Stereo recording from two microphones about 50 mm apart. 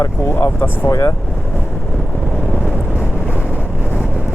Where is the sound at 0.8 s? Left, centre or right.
Left.